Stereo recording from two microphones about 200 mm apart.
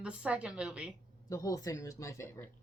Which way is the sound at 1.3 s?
15° left (ahead or behind).